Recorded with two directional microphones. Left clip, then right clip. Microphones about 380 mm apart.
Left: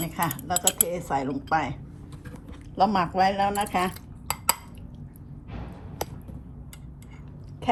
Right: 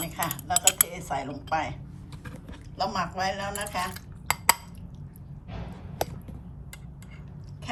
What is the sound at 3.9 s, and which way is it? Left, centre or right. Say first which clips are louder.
Cutlery: right 4 dB; centre.